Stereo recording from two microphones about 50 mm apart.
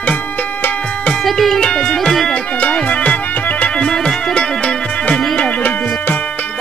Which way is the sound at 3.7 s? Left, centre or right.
Centre.